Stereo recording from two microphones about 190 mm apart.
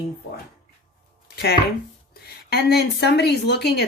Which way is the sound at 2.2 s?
55° left (ahead or behind).